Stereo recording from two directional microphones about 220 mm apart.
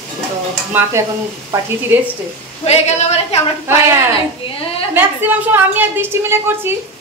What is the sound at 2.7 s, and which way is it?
Speech, 30° left (ahead or behind).